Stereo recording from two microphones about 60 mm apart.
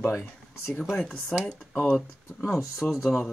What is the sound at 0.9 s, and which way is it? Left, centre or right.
Speech, centre.